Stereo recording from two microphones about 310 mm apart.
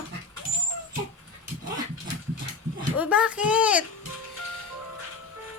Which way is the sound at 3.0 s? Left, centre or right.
Centre.